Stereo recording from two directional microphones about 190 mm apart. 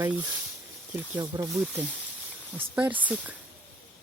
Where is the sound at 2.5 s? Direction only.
10° right (ahead or behind).